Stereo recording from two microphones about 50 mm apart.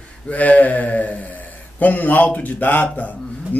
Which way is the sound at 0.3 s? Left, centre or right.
Left.